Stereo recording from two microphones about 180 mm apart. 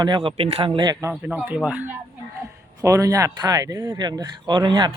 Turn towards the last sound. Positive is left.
turn(degrees=-25)  # may be behind; listen again after turning